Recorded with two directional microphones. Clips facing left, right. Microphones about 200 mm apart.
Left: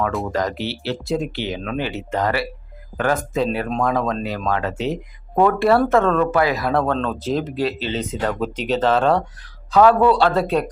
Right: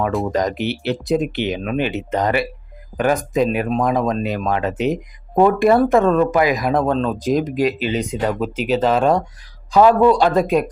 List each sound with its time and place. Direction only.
0.3 s speech: 20° right (ahead or behind)